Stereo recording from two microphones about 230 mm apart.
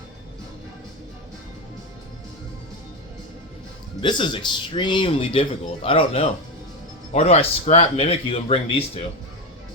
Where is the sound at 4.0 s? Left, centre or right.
Left.